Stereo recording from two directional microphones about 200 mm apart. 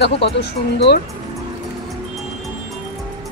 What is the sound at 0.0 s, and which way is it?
Speech, 55° left (ahead or behind).